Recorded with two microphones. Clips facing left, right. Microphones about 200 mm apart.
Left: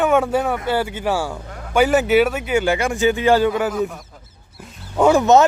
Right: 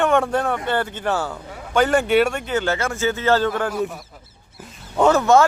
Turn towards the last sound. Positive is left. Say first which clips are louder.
# left 2 dB
turn(degrees=20)  # may be behind; listen again after turning